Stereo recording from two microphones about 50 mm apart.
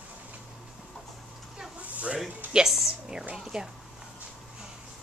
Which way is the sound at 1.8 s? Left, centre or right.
Right.